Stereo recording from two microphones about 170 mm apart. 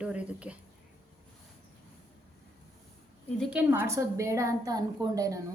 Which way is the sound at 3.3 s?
5° right (ahead or behind).